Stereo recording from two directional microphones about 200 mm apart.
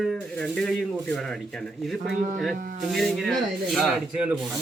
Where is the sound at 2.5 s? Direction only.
40° right (ahead or behind).